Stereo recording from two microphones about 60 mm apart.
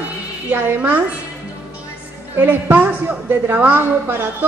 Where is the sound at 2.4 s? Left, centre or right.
Right.